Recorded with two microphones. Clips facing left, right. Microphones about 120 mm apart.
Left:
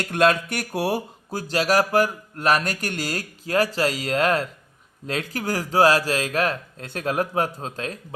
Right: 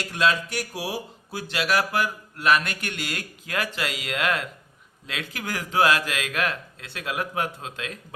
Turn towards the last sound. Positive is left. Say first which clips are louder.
# left 4 dB
turn(degrees=40)  # may be behind; listen again after turning